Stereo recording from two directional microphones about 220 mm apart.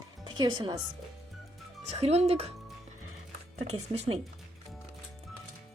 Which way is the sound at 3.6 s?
30° right (ahead or behind).